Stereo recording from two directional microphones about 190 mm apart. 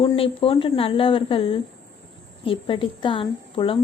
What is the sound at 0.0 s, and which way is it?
A woman's voice, 25° left (ahead or behind).